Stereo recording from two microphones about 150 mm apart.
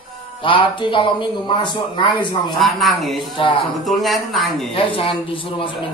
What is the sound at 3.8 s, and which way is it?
Speech, centre (ahead or behind).